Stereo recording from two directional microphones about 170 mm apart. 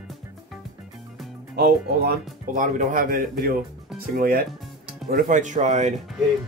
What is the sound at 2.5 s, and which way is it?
Speech, 50° right (ahead or behind).